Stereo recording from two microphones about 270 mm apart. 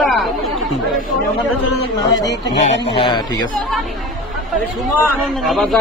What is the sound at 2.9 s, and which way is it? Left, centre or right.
Speech, centre.